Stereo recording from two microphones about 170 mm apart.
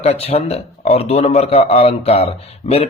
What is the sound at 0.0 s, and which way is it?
A man's voice, 40° left (ahead or behind).